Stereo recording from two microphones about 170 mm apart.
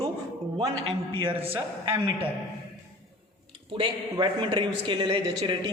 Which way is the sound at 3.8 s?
25° right (ahead or behind).